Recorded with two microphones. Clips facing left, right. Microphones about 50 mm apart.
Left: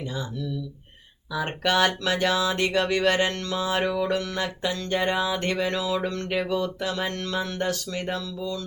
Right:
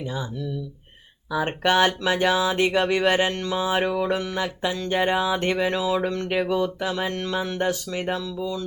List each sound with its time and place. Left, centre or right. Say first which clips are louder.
0.1 s speech: right 1 dB; centre